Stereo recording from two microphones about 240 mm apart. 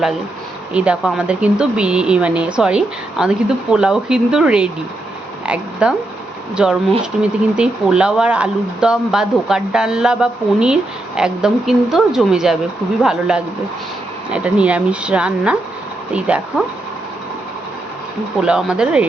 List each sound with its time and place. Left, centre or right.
0.7 s speech: centre
5.8 s speech: centre
18.4 s speech: centre